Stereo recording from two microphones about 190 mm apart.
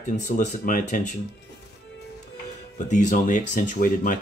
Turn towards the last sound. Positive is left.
turn(degrees=45)  # may be behind; listen again after turning